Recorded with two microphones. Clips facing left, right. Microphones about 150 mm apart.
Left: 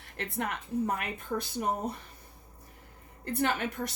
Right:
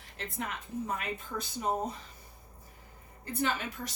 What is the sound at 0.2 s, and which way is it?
A woman's voice, 60° left (ahead or behind).